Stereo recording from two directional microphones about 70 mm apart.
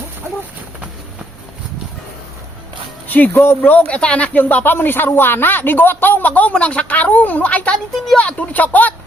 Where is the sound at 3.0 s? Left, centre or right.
Left.